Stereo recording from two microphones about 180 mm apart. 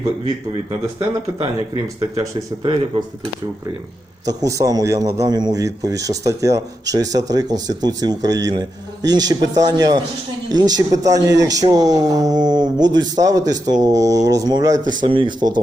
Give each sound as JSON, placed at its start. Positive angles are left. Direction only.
{"t": 0.9, "sound": "speech", "side_deg": -35}
{"t": 4.4, "sound": "speech", "side_deg": -20}